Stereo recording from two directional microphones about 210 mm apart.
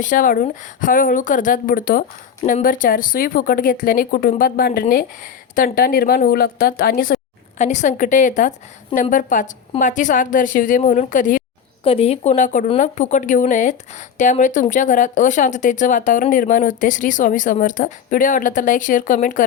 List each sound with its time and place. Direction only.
0.0 s a woman's voice: 40° left (ahead or behind)
7.6 s speech: 35° left (ahead or behind)